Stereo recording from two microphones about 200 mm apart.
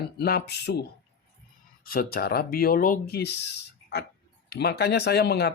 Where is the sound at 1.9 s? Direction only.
50° left (ahead or behind).